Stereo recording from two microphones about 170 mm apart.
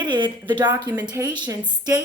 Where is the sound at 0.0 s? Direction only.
25° right (ahead or behind).